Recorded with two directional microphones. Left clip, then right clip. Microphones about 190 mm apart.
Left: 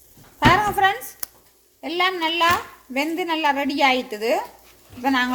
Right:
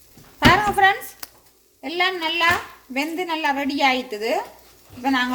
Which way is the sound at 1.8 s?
25° left (ahead or behind).